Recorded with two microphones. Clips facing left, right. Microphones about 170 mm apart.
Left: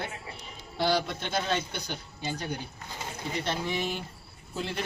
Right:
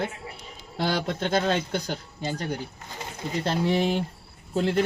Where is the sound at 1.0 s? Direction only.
90° right.